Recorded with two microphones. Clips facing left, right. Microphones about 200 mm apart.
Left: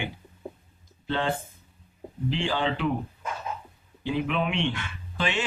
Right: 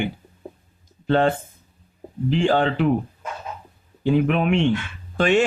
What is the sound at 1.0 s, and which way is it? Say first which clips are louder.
Speech: right 9 dB; 50° right (ahead or behind).